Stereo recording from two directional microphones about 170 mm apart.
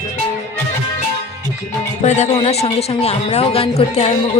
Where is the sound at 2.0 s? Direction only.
40° left (ahead or behind).